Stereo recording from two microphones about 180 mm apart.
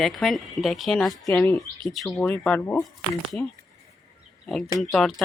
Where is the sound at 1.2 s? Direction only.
20° left (ahead or behind).